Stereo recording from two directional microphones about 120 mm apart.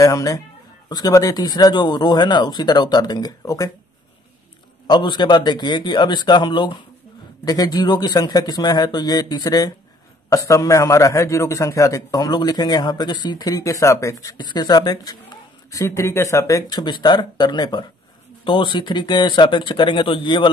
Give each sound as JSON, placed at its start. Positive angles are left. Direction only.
{"t": 0.0, "sound": "a man's voice", "side_deg": 25}
{"t": 4.8, "sound": "a man's voice", "side_deg": 40}
{"t": 15.7, "sound": "speech", "side_deg": 25}